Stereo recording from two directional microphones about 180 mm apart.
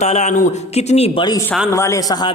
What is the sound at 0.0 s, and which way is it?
Speech, 40° left (ahead or behind).